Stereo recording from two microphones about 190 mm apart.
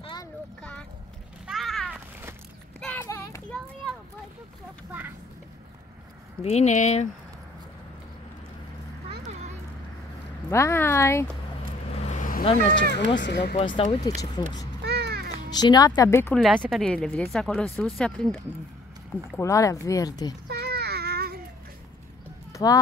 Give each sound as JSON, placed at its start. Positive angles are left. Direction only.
{"t": 0.0, "sound": "a sound", "side_deg": 20}
{"t": 0.6, "sound": "vehicle", "side_deg": 5}
{"t": 1.5, "sound": "a sound", "side_deg": 0}
{"t": 2.8, "sound": "clip-clop", "side_deg": 10}
{"t": 6.4, "sound": "speech", "side_deg": 35}
{"t": 10.5, "sound": "speech", "side_deg": 15}
{"t": 12.0, "sound": "vehicle", "side_deg": 40}
{"t": 12.9, "sound": "speech", "side_deg": 70}
{"t": 13.6, "sound": "speech", "side_deg": 30}
{"t": 14.8, "sound": "babbling", "side_deg": -60}
{"t": 15.5, "sound": "speech", "side_deg": 20}
{"t": 19.3, "sound": "speech", "side_deg": 15}
{"t": 20.4, "sound": "child singing", "side_deg": -55}
{"t": 22.5, "sound": "clip-clop", "side_deg": 20}